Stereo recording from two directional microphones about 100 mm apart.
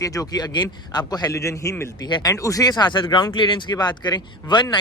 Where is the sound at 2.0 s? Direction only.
45° left (ahead or behind).